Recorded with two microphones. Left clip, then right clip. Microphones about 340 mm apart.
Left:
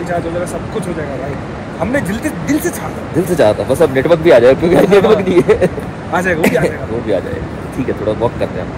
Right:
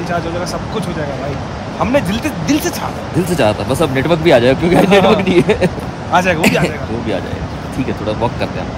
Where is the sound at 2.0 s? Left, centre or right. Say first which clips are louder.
Right 1 dB; centre.